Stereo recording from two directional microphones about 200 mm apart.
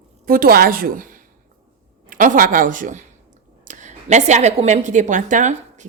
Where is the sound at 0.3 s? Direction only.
45° right (ahead or behind).